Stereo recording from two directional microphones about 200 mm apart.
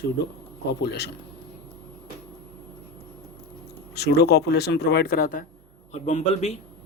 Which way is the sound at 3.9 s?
55° left (ahead or behind).